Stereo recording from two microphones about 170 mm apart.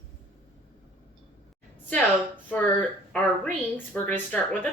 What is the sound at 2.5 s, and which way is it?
Speech, 10° left (ahead or behind).